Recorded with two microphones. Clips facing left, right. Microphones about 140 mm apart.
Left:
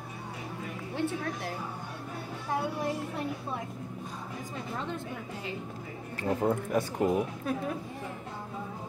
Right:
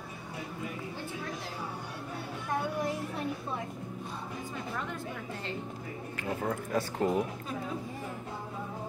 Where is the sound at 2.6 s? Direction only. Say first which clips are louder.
Right 1 dB; 30° left (ahead or behind).